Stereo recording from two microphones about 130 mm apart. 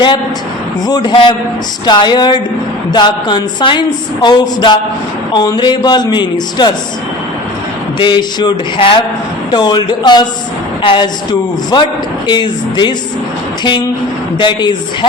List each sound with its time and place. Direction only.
0.9 s speech: 30° left (ahead or behind)
7.9 s speech: 35° left (ahead or behind)
14.3 s speech: 35° left (ahead or behind)